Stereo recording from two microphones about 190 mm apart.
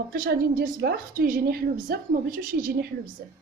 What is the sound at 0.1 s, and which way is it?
A woman's voice, 50° right (ahead or behind).